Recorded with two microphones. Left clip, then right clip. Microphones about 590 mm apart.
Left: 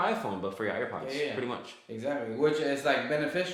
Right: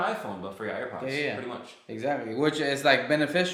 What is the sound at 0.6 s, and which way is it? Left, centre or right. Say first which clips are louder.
Speech: left 1 dB; left.